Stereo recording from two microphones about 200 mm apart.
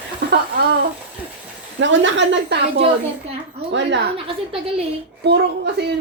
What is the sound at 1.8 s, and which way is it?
Speech, 70° right (ahead or behind).